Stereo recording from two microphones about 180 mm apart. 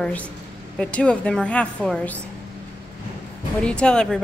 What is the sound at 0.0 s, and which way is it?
A woman's voice, 10° left (ahead or behind).